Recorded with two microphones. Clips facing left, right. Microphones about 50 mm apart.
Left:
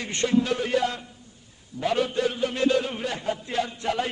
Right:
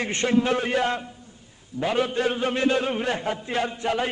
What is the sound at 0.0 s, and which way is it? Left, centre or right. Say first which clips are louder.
Music: right 1 dB; right.